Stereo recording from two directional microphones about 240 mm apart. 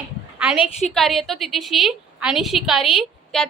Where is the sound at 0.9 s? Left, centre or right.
Centre.